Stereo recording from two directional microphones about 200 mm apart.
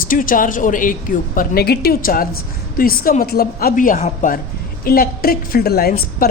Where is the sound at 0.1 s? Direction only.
45° left (ahead or behind).